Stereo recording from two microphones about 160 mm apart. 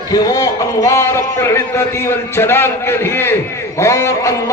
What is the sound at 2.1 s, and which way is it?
A man's voice, 15° left (ahead or behind).